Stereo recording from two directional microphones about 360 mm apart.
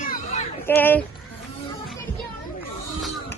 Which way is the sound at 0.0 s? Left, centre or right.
Left.